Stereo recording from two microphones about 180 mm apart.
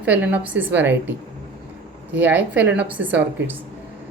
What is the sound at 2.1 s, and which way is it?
Speech, 10° right (ahead or behind).